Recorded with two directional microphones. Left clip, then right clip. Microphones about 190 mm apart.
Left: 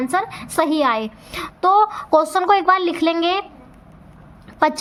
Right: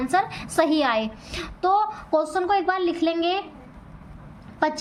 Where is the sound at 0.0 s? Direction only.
25° left (ahead or behind).